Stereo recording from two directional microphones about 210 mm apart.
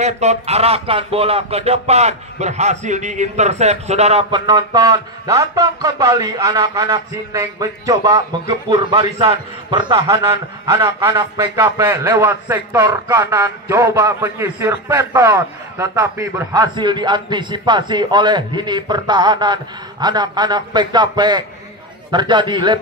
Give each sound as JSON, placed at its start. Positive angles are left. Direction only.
{"t": 0.0, "sound": "speech", "side_deg": -30}